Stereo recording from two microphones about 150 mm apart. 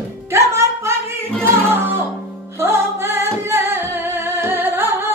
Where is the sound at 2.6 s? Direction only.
15° right (ahead or behind).